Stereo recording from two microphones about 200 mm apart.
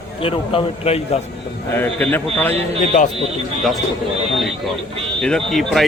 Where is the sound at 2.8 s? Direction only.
35° left (ahead or behind).